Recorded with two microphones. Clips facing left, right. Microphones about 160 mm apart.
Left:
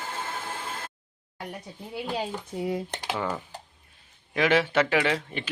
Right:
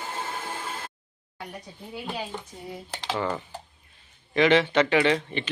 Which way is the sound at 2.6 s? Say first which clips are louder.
Left 10 dB; 90° left.